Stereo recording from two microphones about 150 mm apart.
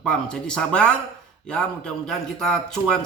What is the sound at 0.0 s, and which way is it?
A man's voice, 5° left (ahead or behind).